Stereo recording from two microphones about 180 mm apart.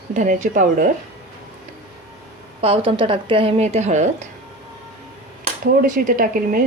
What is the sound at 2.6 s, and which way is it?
A woman's voice, 30° right (ahead or behind).